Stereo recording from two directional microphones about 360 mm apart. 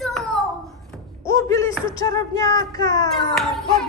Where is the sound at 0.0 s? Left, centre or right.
Centre.